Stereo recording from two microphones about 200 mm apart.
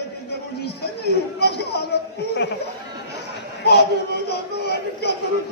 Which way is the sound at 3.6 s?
55° left (ahead or behind).